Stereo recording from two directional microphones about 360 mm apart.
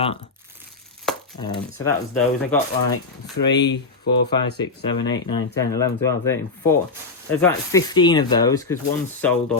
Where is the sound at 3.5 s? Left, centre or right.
Left.